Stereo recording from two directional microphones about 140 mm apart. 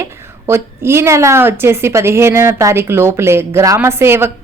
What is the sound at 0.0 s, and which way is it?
A woman's voice, 20° right (ahead or behind).